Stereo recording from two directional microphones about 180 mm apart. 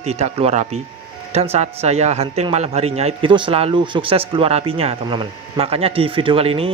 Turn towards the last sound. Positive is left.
turn(degrees=-30)  # may be behind; listen again after turning